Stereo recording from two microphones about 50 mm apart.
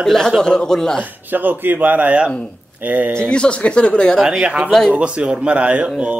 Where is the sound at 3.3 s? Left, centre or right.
Left.